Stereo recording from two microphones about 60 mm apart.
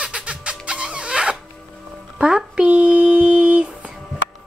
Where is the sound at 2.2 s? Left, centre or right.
Centre.